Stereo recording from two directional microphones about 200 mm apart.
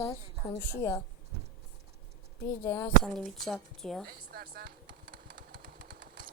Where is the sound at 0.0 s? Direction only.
20° left (ahead or behind).